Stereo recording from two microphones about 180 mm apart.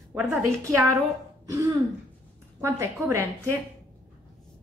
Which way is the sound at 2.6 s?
15° right (ahead or behind).